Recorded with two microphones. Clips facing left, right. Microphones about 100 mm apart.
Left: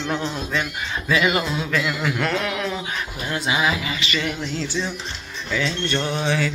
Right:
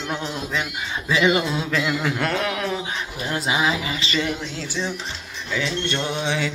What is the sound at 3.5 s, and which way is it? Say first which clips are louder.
Speech: even; 25° right (ahead or behind).